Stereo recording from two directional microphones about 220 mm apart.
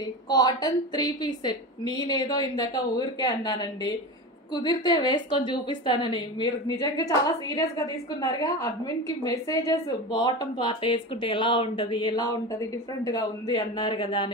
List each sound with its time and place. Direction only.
0.3 s a woman's voice: 20° left (ahead or behind)